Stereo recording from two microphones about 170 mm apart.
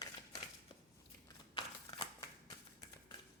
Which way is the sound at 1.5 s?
25° left (ahead or behind).